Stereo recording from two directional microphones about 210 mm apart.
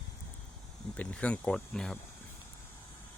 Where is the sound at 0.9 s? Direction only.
5° left (ahead or behind).